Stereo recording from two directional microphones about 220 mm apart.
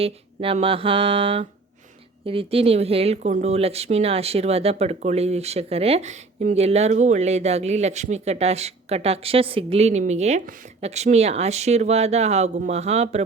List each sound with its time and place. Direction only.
0.0 s speech: 25° right (ahead or behind)